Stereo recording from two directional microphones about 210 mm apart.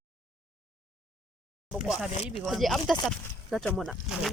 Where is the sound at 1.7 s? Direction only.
5° right (ahead or behind).